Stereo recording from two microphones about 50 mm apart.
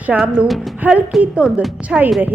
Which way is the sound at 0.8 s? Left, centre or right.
Right.